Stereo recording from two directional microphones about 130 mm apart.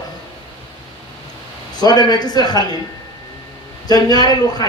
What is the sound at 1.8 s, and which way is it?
Speech, 30° left (ahead or behind).